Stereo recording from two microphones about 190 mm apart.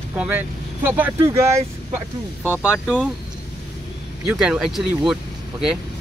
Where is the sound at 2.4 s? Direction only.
10° left (ahead or behind).